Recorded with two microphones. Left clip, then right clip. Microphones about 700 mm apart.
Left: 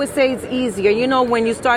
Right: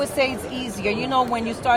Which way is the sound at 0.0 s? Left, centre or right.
Left.